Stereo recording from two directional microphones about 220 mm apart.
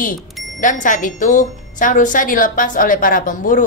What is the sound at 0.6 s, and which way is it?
A woman's voice, 35° left (ahead or behind).